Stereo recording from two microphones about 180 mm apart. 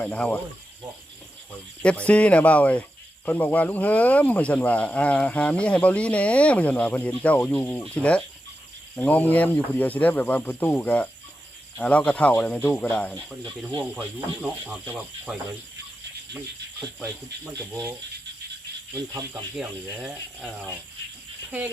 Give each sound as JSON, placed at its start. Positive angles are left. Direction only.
{"t": 0.0, "sound": "speech", "side_deg": 5}
{"t": 1.8, "sound": "speech", "side_deg": 5}
{"t": 17.0, "sound": "speech", "side_deg": -15}
{"t": 19.5, "sound": "speech", "side_deg": -5}